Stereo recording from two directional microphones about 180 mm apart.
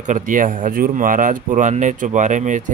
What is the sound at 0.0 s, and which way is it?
Speech, 45° right (ahead or behind).